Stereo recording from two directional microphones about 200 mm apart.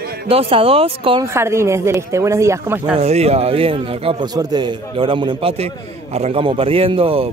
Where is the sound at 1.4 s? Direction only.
15° right (ahead or behind).